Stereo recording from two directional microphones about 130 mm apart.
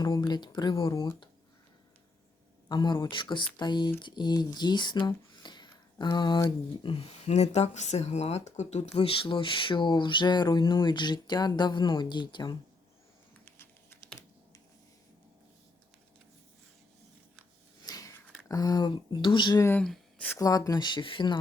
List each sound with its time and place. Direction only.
0.0 s speech: 35° left (ahead or behind)
2.6 s speech: 35° left (ahead or behind)
7.3 s speech: 60° left (ahead or behind); by 12.5 s 35° left (ahead or behind)
13.4 s typing: 20° left (ahead or behind)
17.8 s a sound: 30° left (ahead or behind)
18.4 s speech: 30° left (ahead or behind)
19.8 s speech: 5° left (ahead or behind)
20.4 s speech: 30° left (ahead or behind)